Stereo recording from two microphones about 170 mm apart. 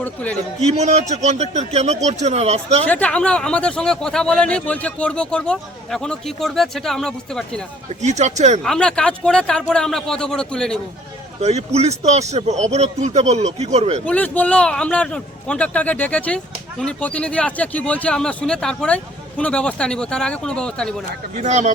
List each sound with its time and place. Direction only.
0.0 s speech: 10° left (ahead or behind)
0.6 s speech: 40° right (ahead or behind)
2.8 s speech: 10° left (ahead or behind)
8.0 s speech: 45° right (ahead or behind)
8.6 s speech: 5° left (ahead or behind)
11.3 s speech: 40° right (ahead or behind)
14.0 s speech: 10° left (ahead or behind)
21.3 s speech: 45° right (ahead or behind)